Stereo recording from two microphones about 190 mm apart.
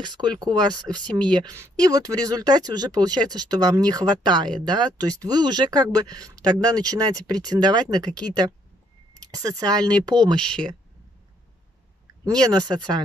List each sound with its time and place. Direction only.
0.0 s speech: 20° right (ahead or behind)
1.0 s speech: 5° left (ahead or behind)
1.3 s speech: 20° right (ahead or behind)
12.3 s speech: 20° right (ahead or behind)